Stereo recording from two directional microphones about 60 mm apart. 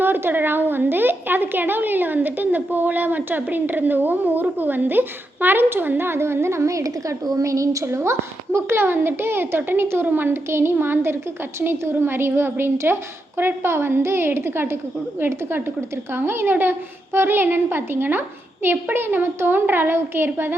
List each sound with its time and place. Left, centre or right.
0.0 s a woman's voice: right
8.5 s a woman's voice: right